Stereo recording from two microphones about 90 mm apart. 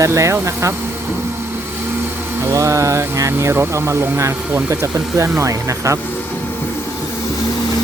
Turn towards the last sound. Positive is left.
turn(degrees=-35)  # may be behind; listen again after turning